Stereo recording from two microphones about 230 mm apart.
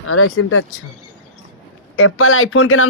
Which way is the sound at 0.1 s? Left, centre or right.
Left.